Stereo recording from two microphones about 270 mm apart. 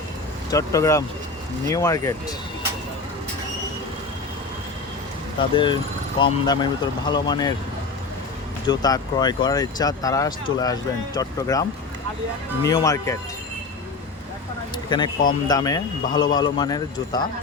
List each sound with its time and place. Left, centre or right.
0.5 s speech: centre
5.4 s speech: centre
8.6 s speech: centre
12.6 s speech: centre
14.8 s speech: centre